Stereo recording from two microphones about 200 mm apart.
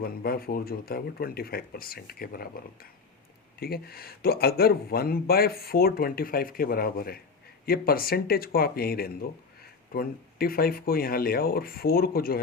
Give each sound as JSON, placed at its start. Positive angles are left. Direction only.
{"t": 0.0, "sound": "speech", "side_deg": 50}
{"t": 3.6, "sound": "speech", "side_deg": 50}